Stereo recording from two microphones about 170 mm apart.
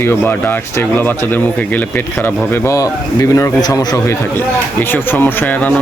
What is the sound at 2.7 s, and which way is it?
Speech, 20° left (ahead or behind).